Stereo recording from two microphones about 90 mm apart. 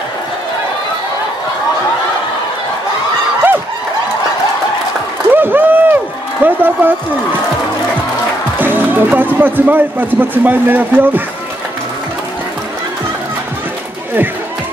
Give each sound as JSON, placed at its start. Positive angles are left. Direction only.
{"t": 5.3, "sound": "a sound", "side_deg": -20}
{"t": 6.4, "sound": "speech", "side_deg": -20}
{"t": 8.5, "sound": "speech", "side_deg": -20}